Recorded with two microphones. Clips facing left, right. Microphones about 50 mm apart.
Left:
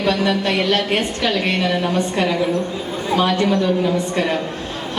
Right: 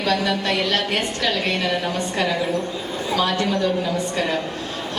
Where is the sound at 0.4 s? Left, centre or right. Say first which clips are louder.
Left 3 dB; left.